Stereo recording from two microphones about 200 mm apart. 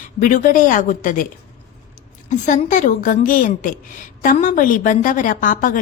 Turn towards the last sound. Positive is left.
turn(degrees=40)  # may be behind; listen again after turning